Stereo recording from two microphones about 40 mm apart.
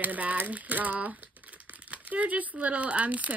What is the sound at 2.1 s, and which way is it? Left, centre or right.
Speech, right.